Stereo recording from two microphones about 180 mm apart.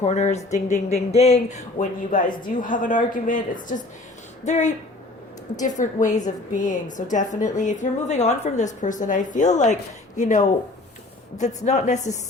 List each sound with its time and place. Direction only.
0.0 s a woman's voice: 40° left (ahead or behind)